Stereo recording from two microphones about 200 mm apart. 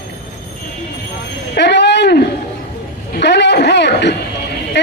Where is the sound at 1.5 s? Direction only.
60° left (ahead or behind).